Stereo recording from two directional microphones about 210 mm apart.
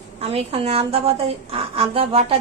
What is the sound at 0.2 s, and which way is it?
A woman's voice, 30° right (ahead or behind).